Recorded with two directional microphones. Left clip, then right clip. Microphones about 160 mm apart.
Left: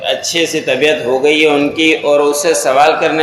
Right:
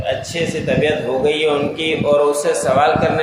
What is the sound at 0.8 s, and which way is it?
A man's voice, 35° left (ahead or behind).